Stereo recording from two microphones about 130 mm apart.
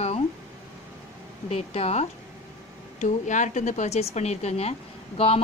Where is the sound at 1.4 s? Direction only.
50° left (ahead or behind).